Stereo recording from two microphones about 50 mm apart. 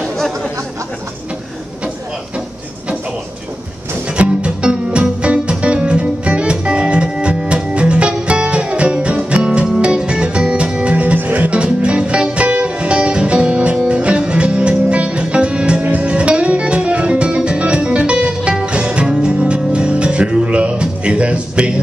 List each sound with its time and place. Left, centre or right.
0.0 s chatter: centre
4.2 s music: right
11.1 s music: right
11.5 s music: right
15.8 s music: right
16.1 s music: right